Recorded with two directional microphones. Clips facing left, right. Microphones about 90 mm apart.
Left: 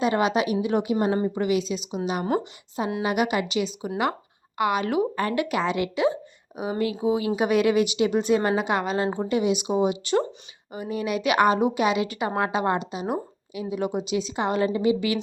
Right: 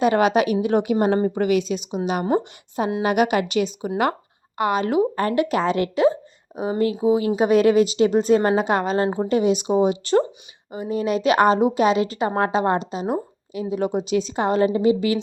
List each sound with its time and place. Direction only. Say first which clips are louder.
0.0 s a woman's voice: right 5 dB; 55° right (ahead or behind)
3.0 s speech: right 5 dB; 55° right (ahead or behind)
4.5 s a woman's voice: right 3 dB; 35° right (ahead or behind)
9.0 s speech: right 4 dB; 20° right (ahead or behind)
9.3 s a woman's voice: right 4 dB; 40° right (ahead or behind)
10.7 s a woman's voice: right 5 dB; 30° right (ahead or behind)